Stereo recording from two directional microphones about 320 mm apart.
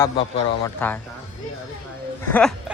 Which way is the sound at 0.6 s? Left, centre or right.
Centre.